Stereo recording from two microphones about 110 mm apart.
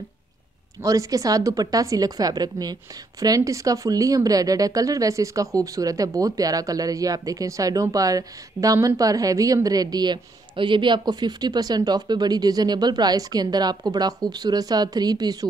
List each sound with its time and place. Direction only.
0.8 s a woman's voice: 30° right (ahead or behind)